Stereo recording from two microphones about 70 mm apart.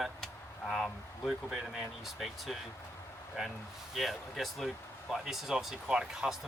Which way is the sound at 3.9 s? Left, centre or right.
Centre.